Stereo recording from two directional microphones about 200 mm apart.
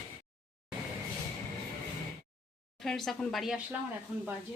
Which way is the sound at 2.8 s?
Centre (ahead or behind).